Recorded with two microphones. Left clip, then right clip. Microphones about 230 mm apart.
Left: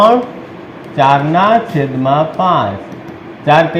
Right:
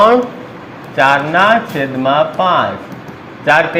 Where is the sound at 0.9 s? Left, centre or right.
Right.